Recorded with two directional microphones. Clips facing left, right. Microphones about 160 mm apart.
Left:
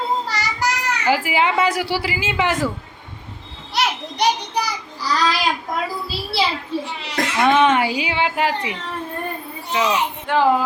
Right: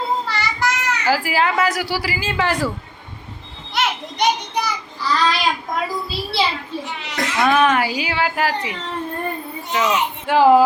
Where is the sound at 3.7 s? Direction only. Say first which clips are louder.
Even; 35° left (ahead or behind).